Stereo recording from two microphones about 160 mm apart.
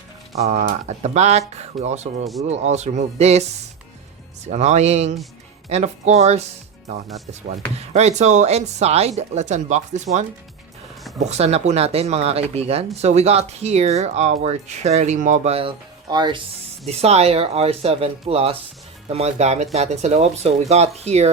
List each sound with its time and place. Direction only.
0.3 s speech: 45° right (ahead or behind)
4.4 s speech: 45° right (ahead or behind)
7.8 s speech: 45° right (ahead or behind)
16.0 s speech: 25° right (ahead or behind)
16.8 s speech: 40° right (ahead or behind)